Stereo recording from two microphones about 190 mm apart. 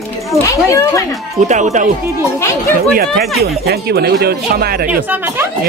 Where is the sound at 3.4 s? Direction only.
55° right (ahead or behind).